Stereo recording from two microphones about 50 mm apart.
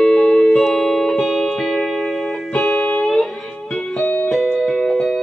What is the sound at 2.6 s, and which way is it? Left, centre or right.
Music, left.